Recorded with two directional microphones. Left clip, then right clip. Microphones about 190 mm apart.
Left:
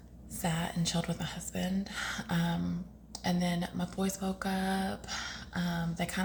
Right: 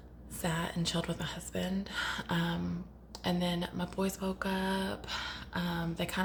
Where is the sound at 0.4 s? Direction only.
15° right (ahead or behind).